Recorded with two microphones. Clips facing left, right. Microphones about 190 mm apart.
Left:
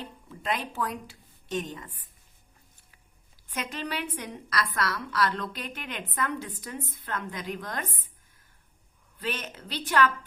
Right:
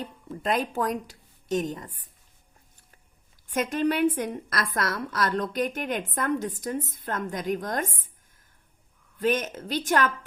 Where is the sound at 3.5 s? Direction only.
50° right (ahead or behind).